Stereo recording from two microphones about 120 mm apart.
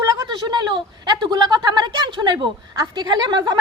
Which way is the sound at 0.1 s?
35° right (ahead or behind).